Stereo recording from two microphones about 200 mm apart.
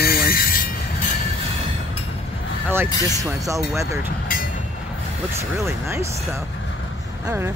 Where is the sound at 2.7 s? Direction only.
15° right (ahead or behind).